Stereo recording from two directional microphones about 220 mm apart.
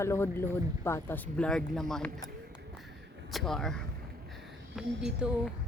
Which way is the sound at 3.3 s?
Centre (ahead or behind).